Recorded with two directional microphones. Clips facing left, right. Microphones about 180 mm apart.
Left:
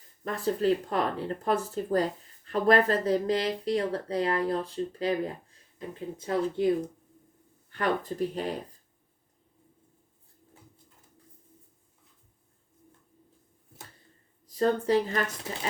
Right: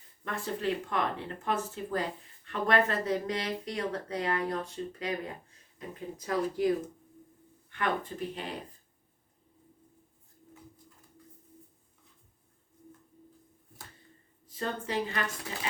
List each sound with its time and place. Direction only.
0.3 s speech: 35° left (ahead or behind)
7.7 s speech: 40° left (ahead or behind)
14.4 s a woman's voice: 40° left (ahead or behind)